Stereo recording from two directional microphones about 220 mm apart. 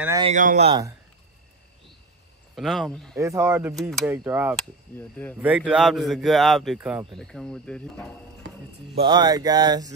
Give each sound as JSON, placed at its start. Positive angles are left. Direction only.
{"t": 0.2, "sound": "speech", "side_deg": -35}
{"t": 2.5, "sound": "a man's voice", "side_deg": 0}
{"t": 3.2, "sound": "mantra", "side_deg": -15}
{"t": 5.4, "sound": "a man's voice", "side_deg": -5}
{"t": 8.9, "sound": "mantra", "side_deg": -20}